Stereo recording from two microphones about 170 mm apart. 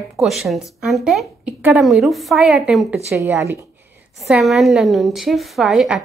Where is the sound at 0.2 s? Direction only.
Centre (ahead or behind).